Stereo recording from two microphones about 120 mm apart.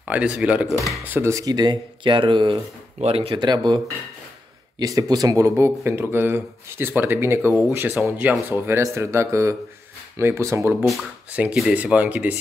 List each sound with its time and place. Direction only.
0.0 s speech: 10° right (ahead or behind)
1.3 s speech: 35° right (ahead or behind)
3.0 s speech: 55° right (ahead or behind)
3.3 s speech: 35° right (ahead or behind); by 12.4 s 15° right (ahead or behind)